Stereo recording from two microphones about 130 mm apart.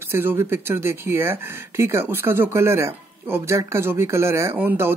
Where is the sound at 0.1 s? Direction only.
15° right (ahead or behind).